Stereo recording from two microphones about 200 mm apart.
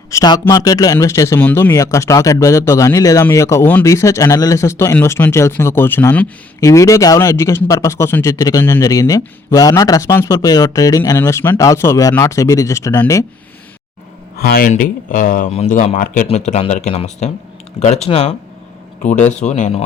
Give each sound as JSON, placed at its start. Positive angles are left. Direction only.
{"t": 0.1, "sound": "speech", "side_deg": 15}
{"t": 14.3, "sound": "speech", "side_deg": 50}
{"t": 19.4, "sound": "speech", "side_deg": 35}